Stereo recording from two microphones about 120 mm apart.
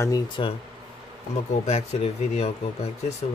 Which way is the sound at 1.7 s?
70° left (ahead or behind).